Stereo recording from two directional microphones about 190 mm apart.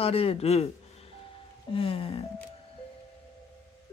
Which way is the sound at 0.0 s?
30° left (ahead or behind).